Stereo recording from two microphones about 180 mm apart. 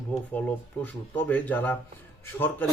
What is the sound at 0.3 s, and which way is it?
Speech, 10° left (ahead or behind).